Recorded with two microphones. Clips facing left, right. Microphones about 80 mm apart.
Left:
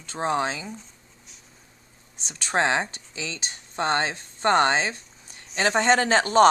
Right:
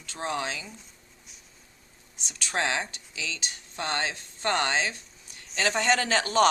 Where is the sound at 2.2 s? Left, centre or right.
Left.